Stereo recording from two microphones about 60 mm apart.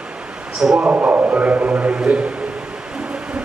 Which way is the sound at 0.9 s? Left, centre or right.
Right.